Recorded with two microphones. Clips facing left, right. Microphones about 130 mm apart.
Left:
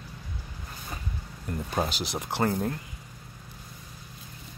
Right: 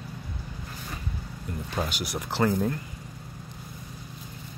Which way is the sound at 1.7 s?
35° left (ahead or behind).